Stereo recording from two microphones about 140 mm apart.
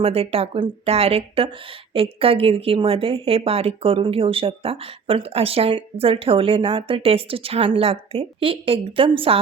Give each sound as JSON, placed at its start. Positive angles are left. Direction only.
{"t": 0.0, "sound": "speech", "side_deg": -45}